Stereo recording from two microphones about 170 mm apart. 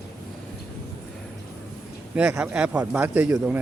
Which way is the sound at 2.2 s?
5° right (ahead or behind).